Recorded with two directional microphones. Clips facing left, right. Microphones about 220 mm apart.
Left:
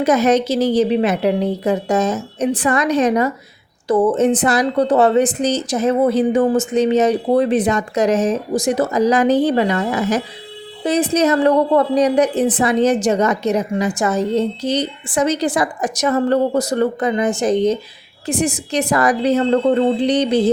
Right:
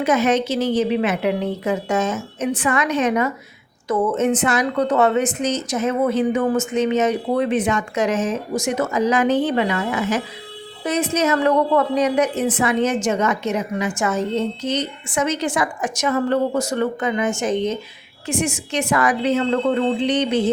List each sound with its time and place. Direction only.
0.0 s a woman's voice: 40° left (ahead or behind)